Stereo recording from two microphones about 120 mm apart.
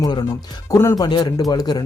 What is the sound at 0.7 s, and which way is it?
Speech, 25° left (ahead or behind).